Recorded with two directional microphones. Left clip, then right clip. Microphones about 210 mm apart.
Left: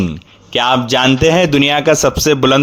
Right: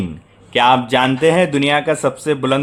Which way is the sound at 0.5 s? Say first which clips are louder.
Even; 25° left (ahead or behind).